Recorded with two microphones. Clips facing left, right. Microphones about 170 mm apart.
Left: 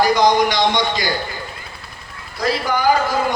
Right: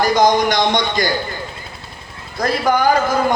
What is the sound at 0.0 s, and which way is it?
A man's voice, 45° right (ahead or behind).